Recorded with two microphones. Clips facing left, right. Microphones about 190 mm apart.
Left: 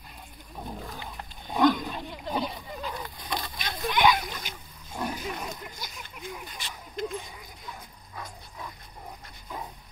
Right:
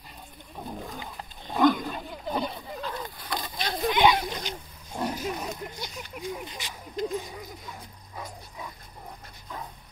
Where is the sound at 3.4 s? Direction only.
20° right (ahead or behind).